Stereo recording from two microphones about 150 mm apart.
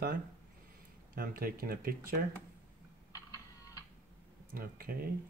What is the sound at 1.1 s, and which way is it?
Speech, 80° right.